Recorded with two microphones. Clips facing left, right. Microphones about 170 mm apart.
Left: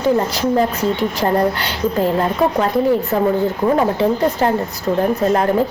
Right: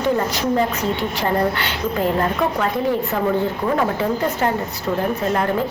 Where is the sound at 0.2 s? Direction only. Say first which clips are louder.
Left 3 dB; 35° left (ahead or behind).